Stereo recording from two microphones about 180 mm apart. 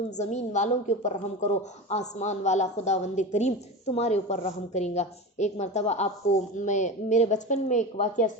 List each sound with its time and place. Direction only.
0.2 s a woman's voice: 40° left (ahead or behind)